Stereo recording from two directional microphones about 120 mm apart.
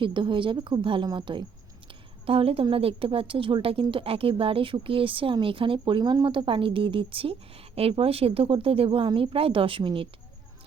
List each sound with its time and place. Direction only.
0.0 s a woman's voice: 45° right (ahead or behind)
2.2 s a woman's voice: 50° right (ahead or behind)